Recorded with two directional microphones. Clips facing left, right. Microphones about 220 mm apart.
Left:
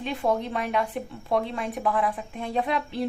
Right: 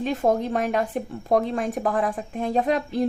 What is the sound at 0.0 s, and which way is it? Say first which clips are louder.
Speech: right 4 dB; 45° right (ahead or behind).